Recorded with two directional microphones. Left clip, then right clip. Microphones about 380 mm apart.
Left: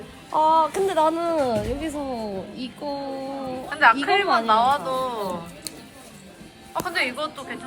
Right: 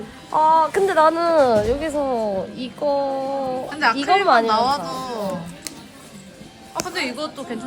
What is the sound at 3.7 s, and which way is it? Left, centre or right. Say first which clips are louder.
Speech: left 1 dB; centre.